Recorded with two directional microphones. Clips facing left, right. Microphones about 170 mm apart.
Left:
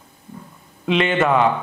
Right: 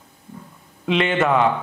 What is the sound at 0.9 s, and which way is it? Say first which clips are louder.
Speech: left 1 dB; 10° left (ahead or behind).